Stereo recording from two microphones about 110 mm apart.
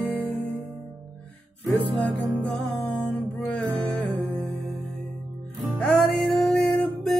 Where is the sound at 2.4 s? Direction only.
10° left (ahead or behind).